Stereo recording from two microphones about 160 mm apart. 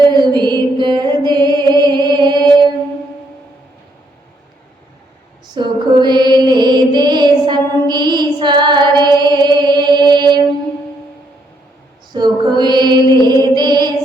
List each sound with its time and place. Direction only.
0.1 s mantra: 30° right (ahead or behind)
5.5 s female singing: 30° right (ahead or behind)
12.1 s music: 25° right (ahead or behind)